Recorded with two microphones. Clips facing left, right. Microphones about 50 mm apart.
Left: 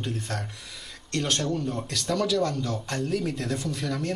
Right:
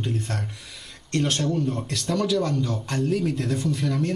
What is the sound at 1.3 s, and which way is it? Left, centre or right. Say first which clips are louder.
Speech: right 3 dB; centre.